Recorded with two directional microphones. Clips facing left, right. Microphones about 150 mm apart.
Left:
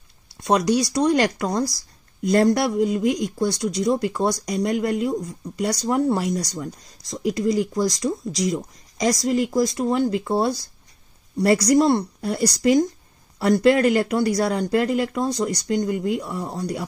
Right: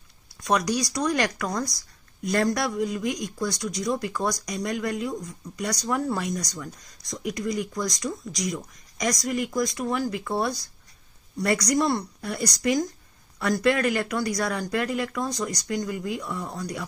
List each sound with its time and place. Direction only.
0.4 s speech: 25° left (ahead or behind)